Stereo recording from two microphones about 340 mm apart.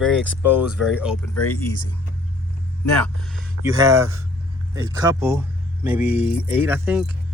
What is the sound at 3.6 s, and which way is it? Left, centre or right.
Speech, centre.